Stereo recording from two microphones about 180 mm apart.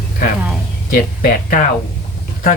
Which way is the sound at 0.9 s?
55° left (ahead or behind).